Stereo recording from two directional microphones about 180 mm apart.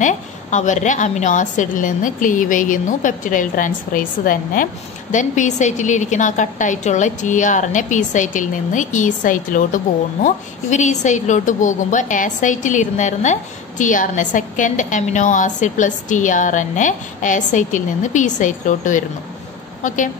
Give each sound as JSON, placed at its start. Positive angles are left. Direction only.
{"t": 0.0, "sound": "a woman's voice", "side_deg": 40}